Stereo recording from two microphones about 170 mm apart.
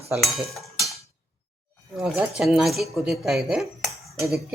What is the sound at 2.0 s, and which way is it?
Speech, 5° right (ahead or behind).